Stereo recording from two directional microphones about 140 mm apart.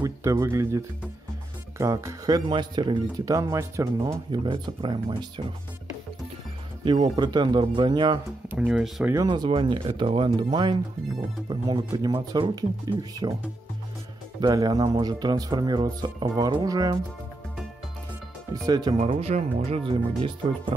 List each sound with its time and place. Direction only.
0.0 s speech: 20° right (ahead or behind)
1.8 s speech: 20° right (ahead or behind)
4.3 s speech: 35° right (ahead or behind)
6.8 s speech: 35° right (ahead or behind)
8.5 s speech: 5° right (ahead or behind)
9.0 s speech: 20° right (ahead or behind)
9.3 s speech: 35° right (ahead or behind)
14.4 s speech: 25° right (ahead or behind)
18.5 s speech: 30° right (ahead or behind)
18.9 s speech: 45° right (ahead or behind)